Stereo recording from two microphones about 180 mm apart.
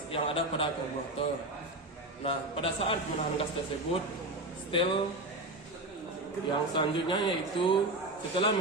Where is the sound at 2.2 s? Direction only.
30° left (ahead or behind).